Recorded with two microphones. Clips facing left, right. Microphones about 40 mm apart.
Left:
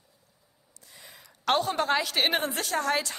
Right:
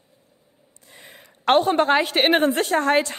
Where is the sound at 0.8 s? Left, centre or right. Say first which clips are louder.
Right 5 dB; right.